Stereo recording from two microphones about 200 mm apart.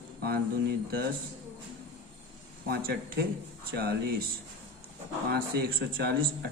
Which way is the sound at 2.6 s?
50° right (ahead or behind).